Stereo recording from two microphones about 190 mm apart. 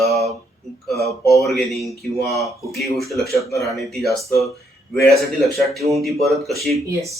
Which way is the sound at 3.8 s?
Centre (ahead or behind).